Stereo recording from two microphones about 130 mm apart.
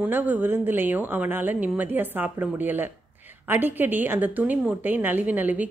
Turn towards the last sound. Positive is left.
turn(degrees=-10)  # may be behind; listen again after turning